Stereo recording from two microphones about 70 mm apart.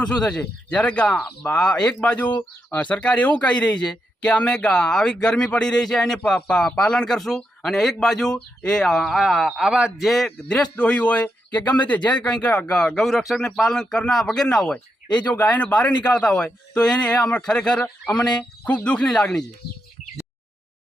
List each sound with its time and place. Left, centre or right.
0.0 s speech: centre
10.2 s speech: centre
18.1 s speech: centre